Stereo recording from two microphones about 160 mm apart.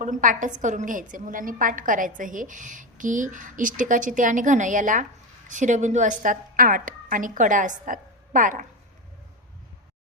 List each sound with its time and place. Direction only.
0.0 s a woman's voice: 55° right (ahead or behind)